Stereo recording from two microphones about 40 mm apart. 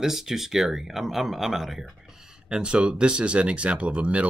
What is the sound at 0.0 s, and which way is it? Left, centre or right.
Speech, centre.